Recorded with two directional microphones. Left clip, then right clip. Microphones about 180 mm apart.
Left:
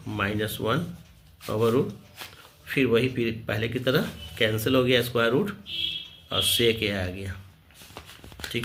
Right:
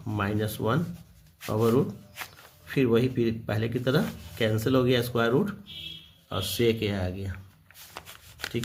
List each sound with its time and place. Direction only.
0.1 s speech: 40° right (ahead or behind)
8.5 s speech: 35° right (ahead or behind)